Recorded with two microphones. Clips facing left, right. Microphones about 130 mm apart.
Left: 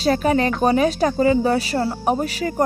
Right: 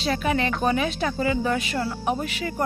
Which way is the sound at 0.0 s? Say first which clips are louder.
Left 6 dB; 40° left (ahead or behind).